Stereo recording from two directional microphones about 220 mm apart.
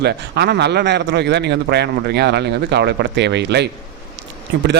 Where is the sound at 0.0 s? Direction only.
50° right (ahead or behind).